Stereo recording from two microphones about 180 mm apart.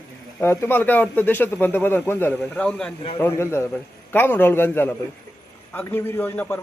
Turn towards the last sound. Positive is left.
turn(degrees=15)  # may be behind; listen again after turning